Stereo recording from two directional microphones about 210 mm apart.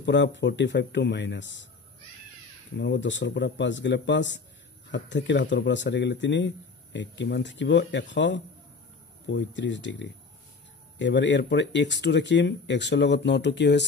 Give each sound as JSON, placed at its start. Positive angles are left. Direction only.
{"t": 0.0, "sound": "speech", "side_deg": 55}
{"t": 2.8, "sound": "speech", "side_deg": 60}